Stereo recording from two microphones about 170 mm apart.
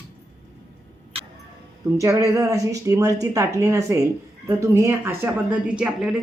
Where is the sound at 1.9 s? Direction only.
15° right (ahead or behind).